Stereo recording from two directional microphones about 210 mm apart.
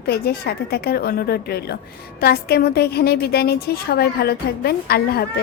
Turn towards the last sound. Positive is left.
turn(degrees=45)  # may be behind; listen again after turning